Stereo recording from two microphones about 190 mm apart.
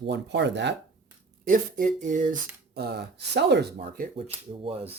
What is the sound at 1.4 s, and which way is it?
Speech, 45° right (ahead or behind).